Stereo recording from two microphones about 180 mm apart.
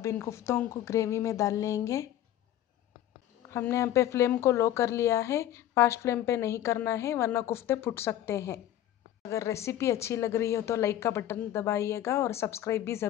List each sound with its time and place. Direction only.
0.0 s speech: 15° left (ahead or behind)
3.4 s speech: 15° left (ahead or behind)